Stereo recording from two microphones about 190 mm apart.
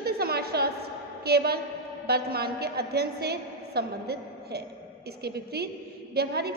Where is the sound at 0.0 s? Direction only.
55° right (ahead or behind).